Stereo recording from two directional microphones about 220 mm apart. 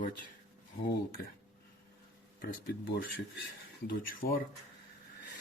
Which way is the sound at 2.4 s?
45° left (ahead or behind).